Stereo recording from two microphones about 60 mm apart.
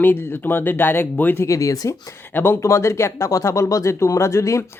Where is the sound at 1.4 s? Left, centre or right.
Left.